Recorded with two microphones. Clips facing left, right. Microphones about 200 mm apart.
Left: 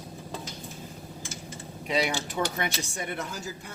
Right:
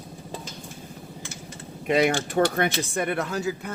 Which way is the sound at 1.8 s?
55° right (ahead or behind).